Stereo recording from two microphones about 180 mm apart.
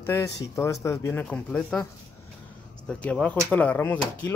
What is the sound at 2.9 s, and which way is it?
Speech, 5° left (ahead or behind).